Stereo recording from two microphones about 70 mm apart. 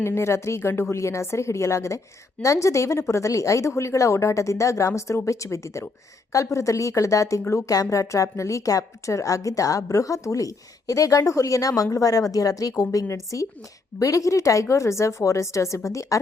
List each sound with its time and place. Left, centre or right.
0.0 s speech: left